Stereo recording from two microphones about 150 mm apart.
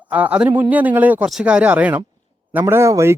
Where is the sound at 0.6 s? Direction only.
10° right (ahead or behind).